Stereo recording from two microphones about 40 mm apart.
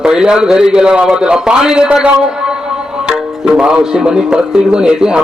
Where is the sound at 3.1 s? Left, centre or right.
Centre.